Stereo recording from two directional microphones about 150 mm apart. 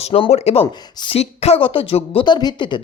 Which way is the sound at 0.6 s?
30° left (ahead or behind).